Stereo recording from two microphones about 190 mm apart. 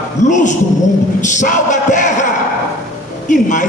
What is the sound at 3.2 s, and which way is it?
Speech, 40° left (ahead or behind).